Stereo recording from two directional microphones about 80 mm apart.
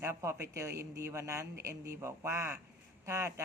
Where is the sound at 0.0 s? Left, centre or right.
Right.